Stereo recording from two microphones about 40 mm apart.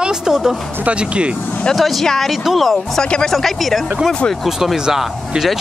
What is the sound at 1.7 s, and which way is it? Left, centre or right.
Speech, centre.